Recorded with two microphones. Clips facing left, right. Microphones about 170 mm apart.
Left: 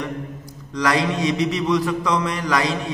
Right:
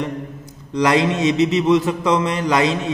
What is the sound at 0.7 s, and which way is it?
A man's voice, 20° right (ahead or behind).